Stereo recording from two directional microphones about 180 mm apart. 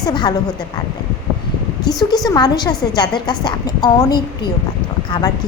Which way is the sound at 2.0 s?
20° left (ahead or behind).